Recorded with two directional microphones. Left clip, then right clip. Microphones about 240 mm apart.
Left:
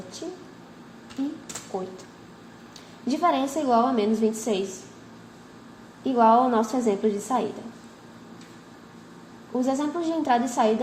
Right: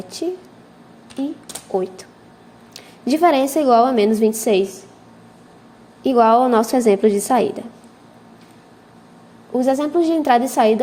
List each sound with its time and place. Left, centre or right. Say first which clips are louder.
1.2 s a woman's voice: right 6 dB; right
2.7 s a woman's voice: right 9 dB; right
6.0 s a woman's voice: right 6 dB; right
9.5 s a woman's voice: right 8 dB; right